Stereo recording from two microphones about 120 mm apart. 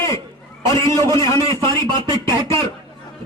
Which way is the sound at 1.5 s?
25° left (ahead or behind).